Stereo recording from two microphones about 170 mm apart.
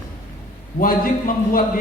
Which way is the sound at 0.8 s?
55° left (ahead or behind).